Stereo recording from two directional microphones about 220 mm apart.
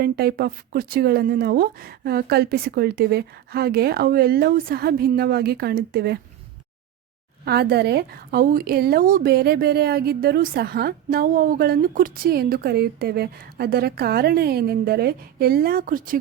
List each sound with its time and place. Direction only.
0.0 s speech: 45° right (ahead or behind)
7.4 s speech: 45° right (ahead or behind)